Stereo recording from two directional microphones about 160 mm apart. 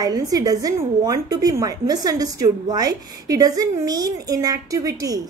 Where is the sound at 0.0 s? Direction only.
25° right (ahead or behind).